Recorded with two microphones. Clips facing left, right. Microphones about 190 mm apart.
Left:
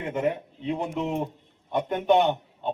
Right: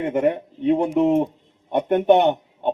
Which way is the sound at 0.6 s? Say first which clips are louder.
Right 11 dB; 60° right (ahead or behind).